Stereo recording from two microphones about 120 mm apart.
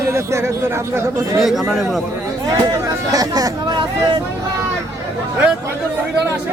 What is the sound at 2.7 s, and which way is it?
Speech, 30° right (ahead or behind).